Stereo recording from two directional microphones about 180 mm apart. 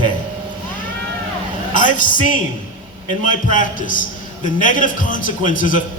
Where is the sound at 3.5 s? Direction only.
50° left (ahead or behind).